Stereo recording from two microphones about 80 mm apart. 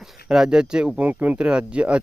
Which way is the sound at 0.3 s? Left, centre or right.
Centre.